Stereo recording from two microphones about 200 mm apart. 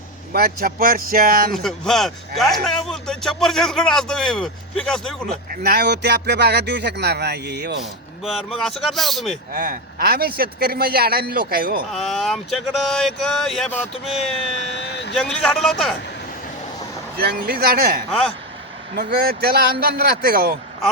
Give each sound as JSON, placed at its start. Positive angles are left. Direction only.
{"t": 0.3, "sound": "a man's voice", "side_deg": -50}
{"t": 1.5, "sound": "speech", "side_deg": 0}
{"t": 5.6, "sound": "speech", "side_deg": -50}
{"t": 7.8, "sound": "speech", "side_deg": 0}
{"t": 9.5, "sound": "a man's voice", "side_deg": -45}
{"t": 11.9, "sound": "speech", "side_deg": 0}
{"t": 14.8, "sound": "vehicle", "side_deg": 55}
{"t": 15.1, "sound": "speech", "side_deg": 5}
{"t": 17.2, "sound": "a man's voice", "side_deg": -50}